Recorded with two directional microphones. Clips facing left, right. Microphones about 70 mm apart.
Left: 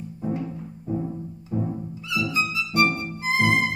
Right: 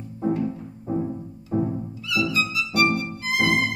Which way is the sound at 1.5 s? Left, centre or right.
Right.